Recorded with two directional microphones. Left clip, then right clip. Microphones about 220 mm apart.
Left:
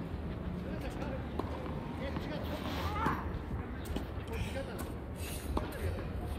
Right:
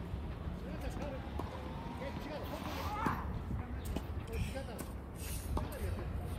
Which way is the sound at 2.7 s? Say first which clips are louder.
Left 3 dB; 45° left (ahead or behind).